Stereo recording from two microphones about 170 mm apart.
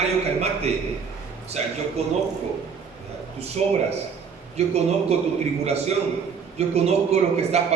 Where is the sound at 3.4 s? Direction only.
40° right (ahead or behind).